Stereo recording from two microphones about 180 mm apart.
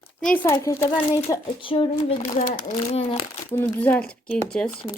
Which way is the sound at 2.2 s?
50° left (ahead or behind).